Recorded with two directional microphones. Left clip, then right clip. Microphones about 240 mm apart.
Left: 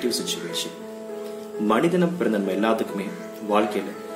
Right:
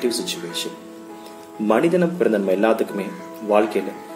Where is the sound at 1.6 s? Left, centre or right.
Centre.